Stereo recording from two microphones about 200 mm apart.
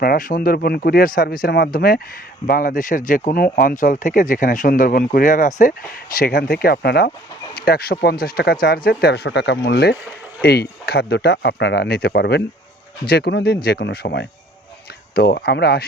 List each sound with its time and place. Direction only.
0.0 s speech: 45° left (ahead or behind)